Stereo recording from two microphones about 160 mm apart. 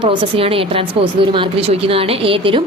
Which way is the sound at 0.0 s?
35° right (ahead or behind).